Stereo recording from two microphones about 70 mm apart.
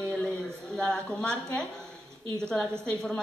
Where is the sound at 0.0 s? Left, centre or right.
Centre.